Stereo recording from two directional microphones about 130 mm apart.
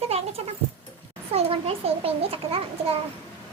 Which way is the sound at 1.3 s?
50° right (ahead or behind).